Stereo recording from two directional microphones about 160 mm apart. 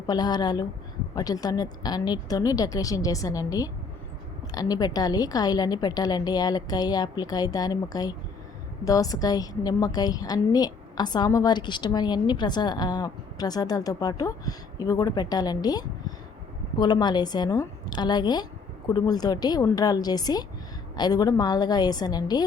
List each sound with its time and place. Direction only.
0.1 s a woman's voice: 25° left (ahead or behind)